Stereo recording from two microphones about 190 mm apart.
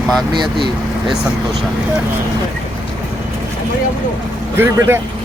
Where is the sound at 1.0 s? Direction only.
Centre (ahead or behind).